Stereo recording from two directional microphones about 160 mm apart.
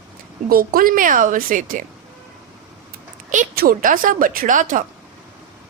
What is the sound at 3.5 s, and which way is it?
A woman's voice, 60° right (ahead or behind).